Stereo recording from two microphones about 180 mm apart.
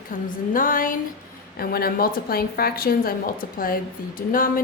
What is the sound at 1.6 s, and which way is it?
A woman's voice, 55° left (ahead or behind).